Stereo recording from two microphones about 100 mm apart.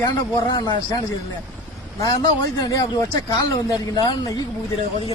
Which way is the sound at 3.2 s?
35° left (ahead or behind).